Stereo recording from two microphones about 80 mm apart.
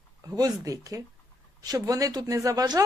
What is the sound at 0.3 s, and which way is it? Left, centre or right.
Speech, right.